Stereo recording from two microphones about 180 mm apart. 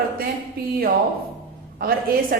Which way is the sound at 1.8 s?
55° right (ahead or behind).